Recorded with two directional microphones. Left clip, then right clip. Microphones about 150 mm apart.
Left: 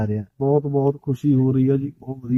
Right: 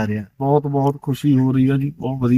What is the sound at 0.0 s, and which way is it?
Speech, 35° left (ahead or behind).